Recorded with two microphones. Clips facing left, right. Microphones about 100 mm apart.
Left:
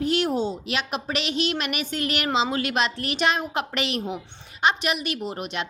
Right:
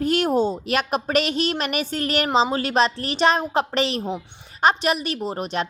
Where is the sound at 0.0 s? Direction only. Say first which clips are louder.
Right 4 dB; 45° right (ahead or behind).